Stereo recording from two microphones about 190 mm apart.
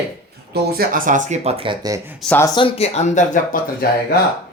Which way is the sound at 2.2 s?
10° left (ahead or behind).